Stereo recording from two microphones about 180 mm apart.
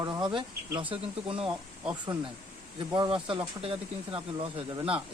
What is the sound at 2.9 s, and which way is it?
Speech, 25° right (ahead or behind).